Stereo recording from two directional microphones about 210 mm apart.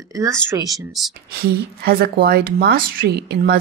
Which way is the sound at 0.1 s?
15° right (ahead or behind).